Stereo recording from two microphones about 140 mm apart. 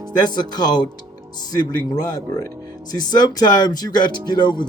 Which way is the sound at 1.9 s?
25° left (ahead or behind).